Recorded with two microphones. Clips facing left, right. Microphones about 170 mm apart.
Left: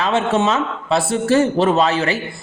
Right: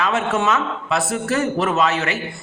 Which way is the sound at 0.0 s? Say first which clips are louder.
Left 3 dB; 30° left (ahead or behind).